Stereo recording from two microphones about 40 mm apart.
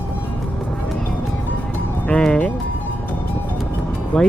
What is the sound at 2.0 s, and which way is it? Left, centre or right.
Speech, left.